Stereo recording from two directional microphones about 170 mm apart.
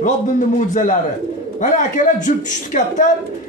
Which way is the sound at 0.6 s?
45° left (ahead or behind).